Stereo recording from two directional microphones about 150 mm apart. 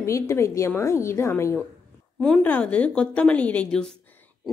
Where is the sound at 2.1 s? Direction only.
5° left (ahead or behind).